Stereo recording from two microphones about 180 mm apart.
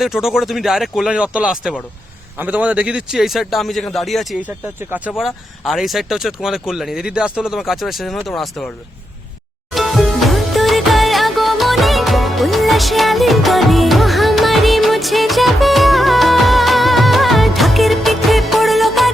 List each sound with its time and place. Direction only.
0.0 s speech: centre (ahead or behind)
9.7 s music: centre (ahead or behind)